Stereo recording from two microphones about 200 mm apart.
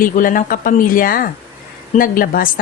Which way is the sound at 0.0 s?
45° left (ahead or behind).